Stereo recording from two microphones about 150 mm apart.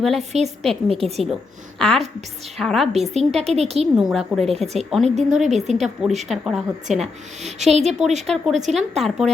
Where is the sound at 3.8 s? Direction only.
Centre (ahead or behind).